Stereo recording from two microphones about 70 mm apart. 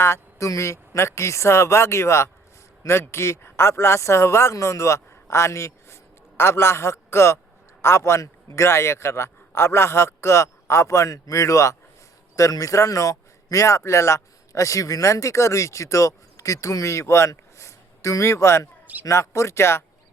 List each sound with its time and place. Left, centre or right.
0.0 s a man's voice: left